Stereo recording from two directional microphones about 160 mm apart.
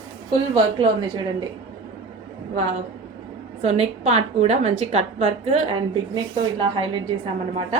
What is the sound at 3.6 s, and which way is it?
A woman's voice, 45° right (ahead or behind).